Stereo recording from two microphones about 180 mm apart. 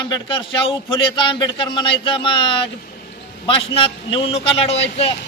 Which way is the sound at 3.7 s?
30° left (ahead or behind).